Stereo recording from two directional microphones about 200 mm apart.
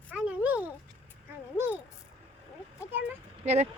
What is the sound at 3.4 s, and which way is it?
Vehicle, 35° right (ahead or behind).